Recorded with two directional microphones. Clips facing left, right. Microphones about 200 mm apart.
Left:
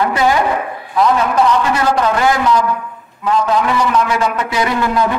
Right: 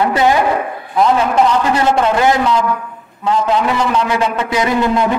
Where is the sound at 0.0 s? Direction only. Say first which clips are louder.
Right 1 dB; 25° right (ahead or behind).